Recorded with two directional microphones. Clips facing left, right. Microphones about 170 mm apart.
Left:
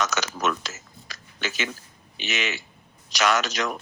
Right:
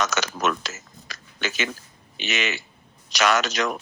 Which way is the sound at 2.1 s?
65° right (ahead or behind).